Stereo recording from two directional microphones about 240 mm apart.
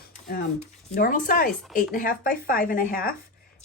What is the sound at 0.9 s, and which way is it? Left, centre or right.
Speech, left.